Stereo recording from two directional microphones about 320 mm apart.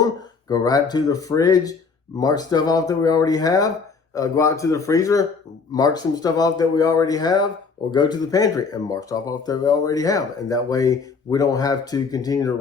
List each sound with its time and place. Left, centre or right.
0.0 s speech: centre